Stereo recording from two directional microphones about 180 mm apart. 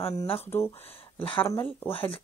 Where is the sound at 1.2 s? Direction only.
30° left (ahead or behind).